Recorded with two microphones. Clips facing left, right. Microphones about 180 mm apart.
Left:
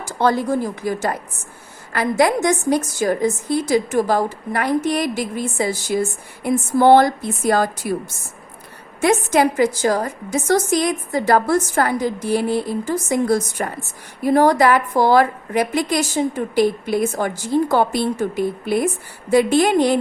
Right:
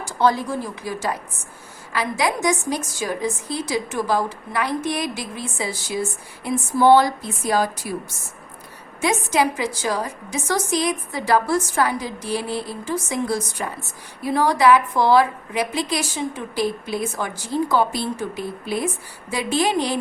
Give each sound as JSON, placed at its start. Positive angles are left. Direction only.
{"t": 0.2, "sound": "a woman's voice", "side_deg": 50}
{"t": 9.0, "sound": "a woman's voice", "side_deg": 50}